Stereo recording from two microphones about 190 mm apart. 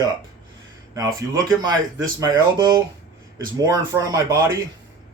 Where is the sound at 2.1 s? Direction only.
20° right (ahead or behind).